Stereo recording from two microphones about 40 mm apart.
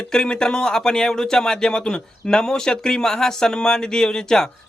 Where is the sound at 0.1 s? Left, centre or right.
Centre.